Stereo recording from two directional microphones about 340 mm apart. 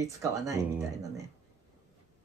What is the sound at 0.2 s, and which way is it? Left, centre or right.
Speech, centre.